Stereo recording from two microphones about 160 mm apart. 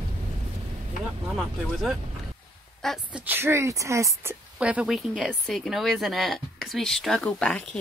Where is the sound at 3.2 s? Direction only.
15° right (ahead or behind).